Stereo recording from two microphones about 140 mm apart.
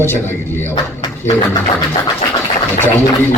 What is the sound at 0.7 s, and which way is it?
Speech, 35° left (ahead or behind).